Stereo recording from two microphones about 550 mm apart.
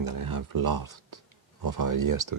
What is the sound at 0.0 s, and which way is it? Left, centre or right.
Speech, right.